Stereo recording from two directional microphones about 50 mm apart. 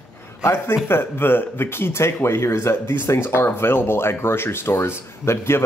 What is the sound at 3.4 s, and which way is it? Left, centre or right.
Speech, left.